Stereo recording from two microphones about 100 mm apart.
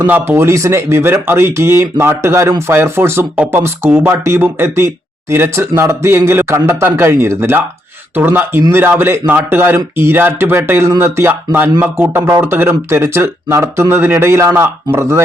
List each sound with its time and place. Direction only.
0.0 s speech: 20° right (ahead or behind)